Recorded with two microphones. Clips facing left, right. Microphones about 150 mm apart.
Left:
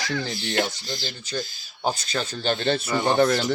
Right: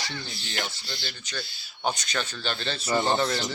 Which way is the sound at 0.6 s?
45° left (ahead or behind).